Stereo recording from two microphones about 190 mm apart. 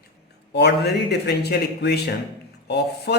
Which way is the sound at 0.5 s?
60° left (ahead or behind).